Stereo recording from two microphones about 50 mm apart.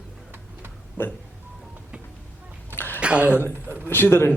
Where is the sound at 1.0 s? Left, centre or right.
Left.